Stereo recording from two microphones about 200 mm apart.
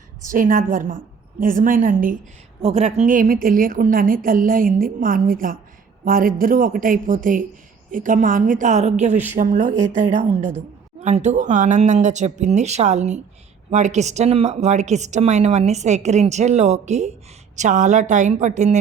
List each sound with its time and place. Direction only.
0.3 s a woman's voice: 40° right (ahead or behind)
2.6 s a woman's voice: 30° right (ahead or behind)